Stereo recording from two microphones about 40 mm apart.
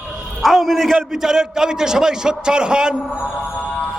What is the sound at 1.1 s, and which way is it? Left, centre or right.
A man's voice, centre.